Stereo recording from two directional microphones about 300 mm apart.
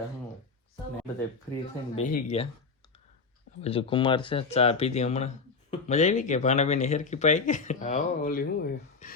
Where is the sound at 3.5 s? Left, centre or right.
Centre.